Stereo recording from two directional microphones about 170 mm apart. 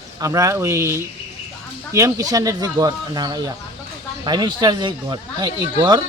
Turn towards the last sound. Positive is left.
turn(degrees=-25)  # may be behind; listen again after turning